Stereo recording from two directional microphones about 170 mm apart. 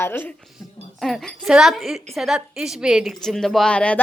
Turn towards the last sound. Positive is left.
turn(degrees=5)  # may be behind; listen again after turning